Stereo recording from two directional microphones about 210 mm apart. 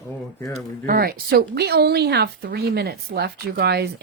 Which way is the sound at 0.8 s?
45° right (ahead or behind).